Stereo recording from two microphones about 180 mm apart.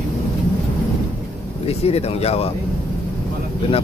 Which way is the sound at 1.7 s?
35° left (ahead or behind).